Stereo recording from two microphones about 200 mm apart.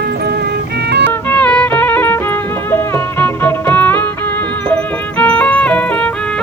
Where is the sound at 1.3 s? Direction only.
5° left (ahead or behind).